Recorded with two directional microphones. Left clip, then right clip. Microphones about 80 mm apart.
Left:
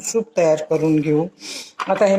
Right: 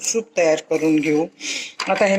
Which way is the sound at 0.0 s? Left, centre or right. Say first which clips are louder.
Left 1 dB; left.